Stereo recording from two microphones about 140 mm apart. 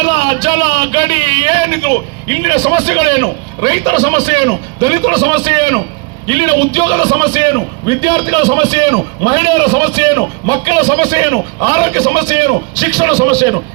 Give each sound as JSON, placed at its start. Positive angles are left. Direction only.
{"t": 0.2, "sound": "a man's voice", "side_deg": -35}